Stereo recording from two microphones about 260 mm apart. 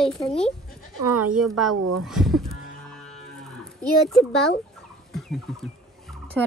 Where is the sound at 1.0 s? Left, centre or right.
Right.